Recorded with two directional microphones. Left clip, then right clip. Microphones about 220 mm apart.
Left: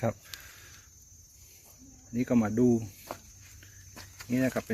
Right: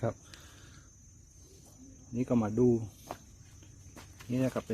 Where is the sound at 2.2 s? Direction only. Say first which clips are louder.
Left 2 dB; 15° right (ahead or behind).